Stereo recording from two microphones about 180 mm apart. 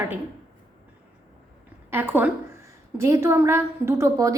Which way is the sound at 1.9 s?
10° right (ahead or behind).